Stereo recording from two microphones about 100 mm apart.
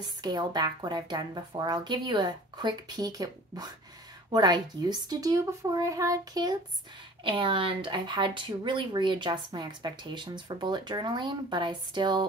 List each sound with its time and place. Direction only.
0.2 s a woman's voice: 45° right (ahead or behind)
7.2 s speech: 60° right (ahead or behind)